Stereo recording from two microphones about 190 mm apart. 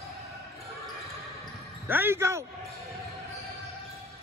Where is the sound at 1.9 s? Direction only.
10° right (ahead or behind).